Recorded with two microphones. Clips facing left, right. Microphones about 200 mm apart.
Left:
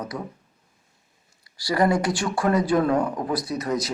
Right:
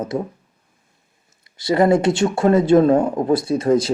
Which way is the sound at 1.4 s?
20° right (ahead or behind).